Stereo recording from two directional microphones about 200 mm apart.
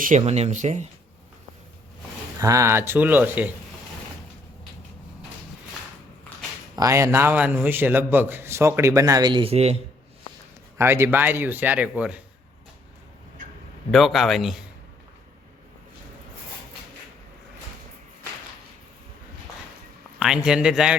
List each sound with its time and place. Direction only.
0.0 s speech: 35° right (ahead or behind)
2.4 s a man's voice: 15° right (ahead or behind)
6.7 s a man's voice: 15° right (ahead or behind); by 9.7 s 30° right (ahead or behind)
10.8 s a man's voice: 15° right (ahead or behind)
13.9 s speech: centre (ahead or behind)
20.1 s speech: 5° right (ahead or behind)